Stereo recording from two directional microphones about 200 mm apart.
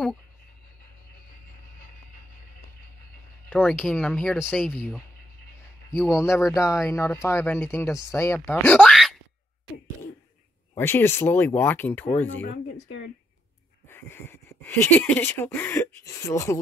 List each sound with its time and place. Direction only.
3.4 s speech: 10° left (ahead or behind)
5.9 s speech: 15° left (ahead or behind)
10.8 s speech: 10° left (ahead or behind)
12.8 s speech: 55° left (ahead or behind)
13.8 s speech: 10° left (ahead or behind)